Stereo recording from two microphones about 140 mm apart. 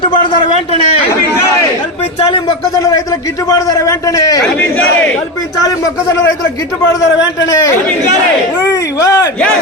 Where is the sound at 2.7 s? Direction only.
25° left (ahead or behind).